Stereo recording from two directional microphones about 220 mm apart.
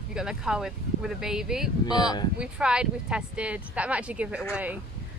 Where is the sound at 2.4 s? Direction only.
5° right (ahead or behind).